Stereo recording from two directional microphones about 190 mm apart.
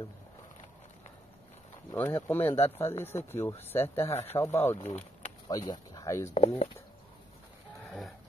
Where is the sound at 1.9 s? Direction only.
10° left (ahead or behind).